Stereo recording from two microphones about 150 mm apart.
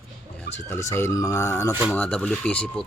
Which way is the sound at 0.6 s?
20° left (ahead or behind).